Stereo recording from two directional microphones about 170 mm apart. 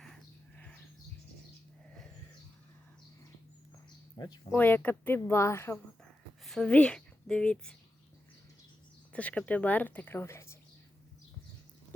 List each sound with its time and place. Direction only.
0.0 s a sound: 5° left (ahead or behind)
4.2 s speech: 25° left (ahead or behind)
4.5 s a woman's voice: 10° left (ahead or behind)
6.4 s a woman's voice: 5° left (ahead or behind)
9.1 s a woman's voice: 10° left (ahead or behind)